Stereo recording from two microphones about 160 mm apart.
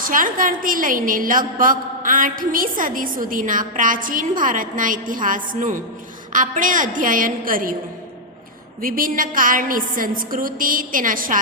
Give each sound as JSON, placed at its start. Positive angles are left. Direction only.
{"t": 0.0, "sound": "a woman's voice", "side_deg": -60}
{"t": 8.8, "sound": "a woman's voice", "side_deg": -60}